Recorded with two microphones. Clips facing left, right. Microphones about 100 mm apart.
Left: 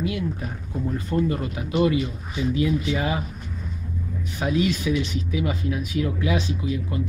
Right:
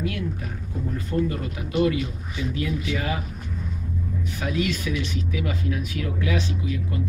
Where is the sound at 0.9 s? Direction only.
20° left (ahead or behind).